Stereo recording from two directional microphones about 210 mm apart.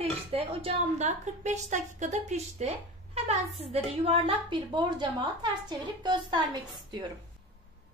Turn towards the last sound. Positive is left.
turn(degrees=-20)  # may be behind; listen again after turning